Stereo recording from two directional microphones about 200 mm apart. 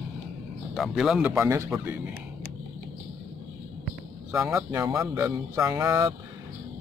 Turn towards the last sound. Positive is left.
turn(degrees=-15)  # may be behind; listen again after turning